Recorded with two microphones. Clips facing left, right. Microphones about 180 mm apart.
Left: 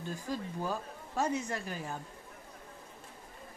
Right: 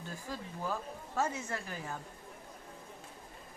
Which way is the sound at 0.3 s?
15° left (ahead or behind).